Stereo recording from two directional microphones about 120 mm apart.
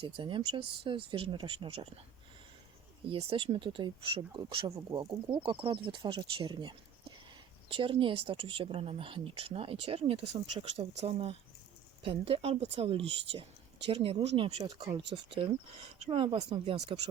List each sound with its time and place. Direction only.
0.0 s speech: 45° right (ahead or behind)
3.1 s speech: 50° right (ahead or behind)
16.4 s speech: 65° right (ahead or behind)